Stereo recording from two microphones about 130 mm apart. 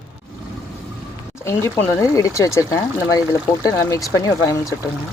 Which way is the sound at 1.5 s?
20° left (ahead or behind).